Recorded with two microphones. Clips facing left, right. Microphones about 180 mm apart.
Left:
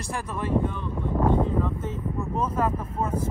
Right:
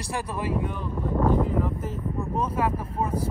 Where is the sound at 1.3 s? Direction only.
25° left (ahead or behind).